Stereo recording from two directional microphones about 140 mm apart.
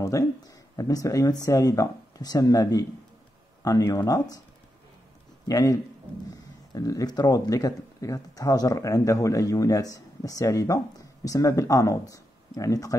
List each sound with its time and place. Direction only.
0.0 s speech: 25° left (ahead or behind)
5.5 s speech: 25° left (ahead or behind)